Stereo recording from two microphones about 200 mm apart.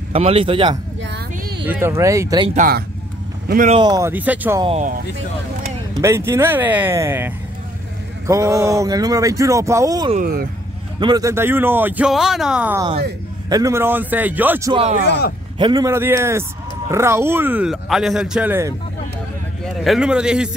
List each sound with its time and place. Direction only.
0.1 s speech: 30° right (ahead or behind)
1.0 s a sound: 55° right (ahead or behind)
1.7 s speech: 10° right (ahead or behind)
2.5 s speech: 45° right (ahead or behind)
3.7 s speech: 20° right (ahead or behind)
4.6 s speech: 30° right (ahead or behind)
5.9 s speech: 15° right (ahead or behind)
10.1 s speech: 50° right (ahead or behind)
11.0 s speech: 20° right (ahead or behind)
14.7 s a man's voice: 30° right (ahead or behind); by 20.5 s 5° right (ahead or behind)